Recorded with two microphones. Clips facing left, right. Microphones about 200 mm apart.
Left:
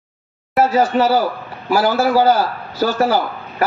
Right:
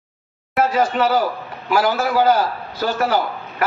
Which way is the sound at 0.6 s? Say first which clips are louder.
Left 3 dB; 30° left (ahead or behind).